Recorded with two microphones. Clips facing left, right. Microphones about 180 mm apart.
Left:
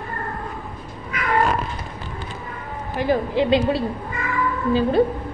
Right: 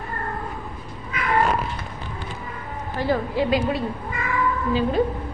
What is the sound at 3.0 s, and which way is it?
Speech, 20° left (ahead or behind).